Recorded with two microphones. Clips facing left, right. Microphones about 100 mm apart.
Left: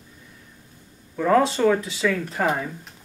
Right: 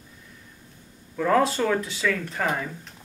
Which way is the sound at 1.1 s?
5° left (ahead or behind).